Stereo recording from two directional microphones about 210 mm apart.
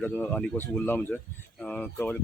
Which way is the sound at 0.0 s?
10° left (ahead or behind).